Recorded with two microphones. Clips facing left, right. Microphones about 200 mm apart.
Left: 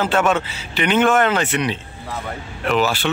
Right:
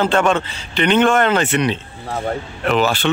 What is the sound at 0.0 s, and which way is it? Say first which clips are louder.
Speech: right 2 dB; 5° left (ahead or behind).